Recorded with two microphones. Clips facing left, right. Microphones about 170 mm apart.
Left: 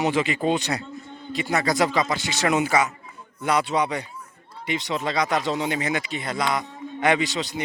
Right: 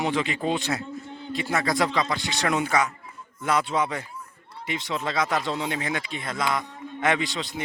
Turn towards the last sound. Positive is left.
turn(degrees=0)  # may be behind; listen again after turning